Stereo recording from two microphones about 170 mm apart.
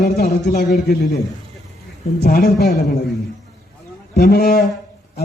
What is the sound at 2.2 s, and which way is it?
Speech, 65° left (ahead or behind).